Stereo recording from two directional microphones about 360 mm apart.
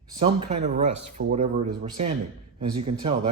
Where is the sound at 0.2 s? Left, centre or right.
Centre.